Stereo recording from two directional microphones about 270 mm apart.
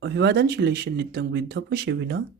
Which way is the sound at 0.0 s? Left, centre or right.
Right.